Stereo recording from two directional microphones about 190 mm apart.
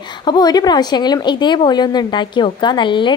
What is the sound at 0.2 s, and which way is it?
A woman's voice, 20° left (ahead or behind).